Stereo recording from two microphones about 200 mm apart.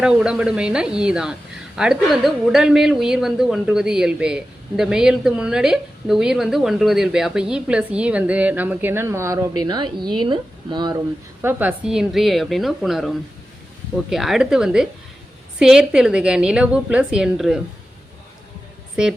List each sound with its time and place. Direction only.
0.0 s a woman's voice: 5° right (ahead or behind); by 10.9 s 20° right (ahead or behind)
11.4 s a woman's voice: 5° right (ahead or behind)